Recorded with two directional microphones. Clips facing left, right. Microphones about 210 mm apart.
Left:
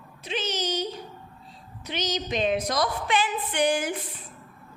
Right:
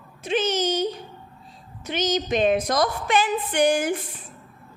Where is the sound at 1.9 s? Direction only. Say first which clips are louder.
Right 6 dB; 50° right (ahead or behind).